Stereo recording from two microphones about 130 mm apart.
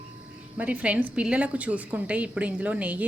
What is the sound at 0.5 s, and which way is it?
A woman's voice, 10° right (ahead or behind).